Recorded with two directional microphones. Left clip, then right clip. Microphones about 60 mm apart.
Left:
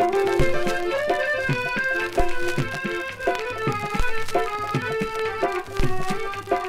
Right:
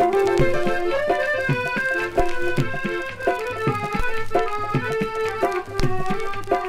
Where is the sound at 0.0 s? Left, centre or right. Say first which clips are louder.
Right 2 dB; right.